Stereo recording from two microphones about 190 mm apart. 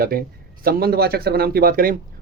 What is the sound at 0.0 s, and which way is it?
A man's voice, 50° right (ahead or behind).